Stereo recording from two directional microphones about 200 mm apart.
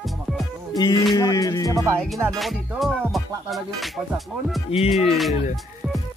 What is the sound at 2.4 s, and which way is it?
Music, centre (ahead or behind).